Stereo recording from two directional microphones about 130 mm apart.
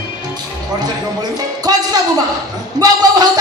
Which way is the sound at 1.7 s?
30° right (ahead or behind).